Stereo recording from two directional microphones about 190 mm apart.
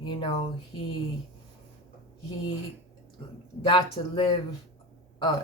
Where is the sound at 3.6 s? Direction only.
25° left (ahead or behind).